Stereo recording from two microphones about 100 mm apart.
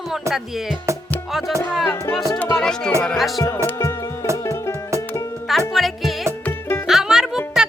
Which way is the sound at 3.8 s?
30° left (ahead or behind).